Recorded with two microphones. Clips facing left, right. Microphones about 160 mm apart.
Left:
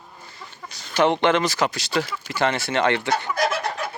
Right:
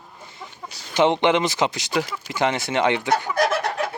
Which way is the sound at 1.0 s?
20° right (ahead or behind).